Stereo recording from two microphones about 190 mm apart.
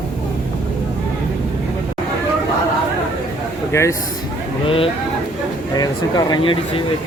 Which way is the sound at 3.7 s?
15° left (ahead or behind).